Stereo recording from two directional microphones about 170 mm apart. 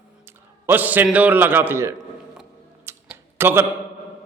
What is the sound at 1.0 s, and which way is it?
Speech, 10° right (ahead or behind).